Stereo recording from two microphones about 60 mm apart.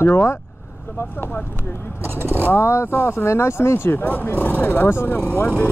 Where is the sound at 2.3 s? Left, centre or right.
Left.